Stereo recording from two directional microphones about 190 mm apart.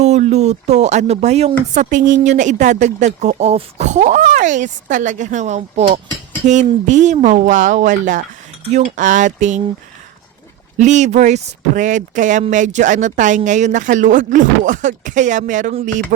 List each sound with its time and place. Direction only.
0.0 s speech: 35° right (ahead or behind)
10.8 s speech: 40° right (ahead or behind)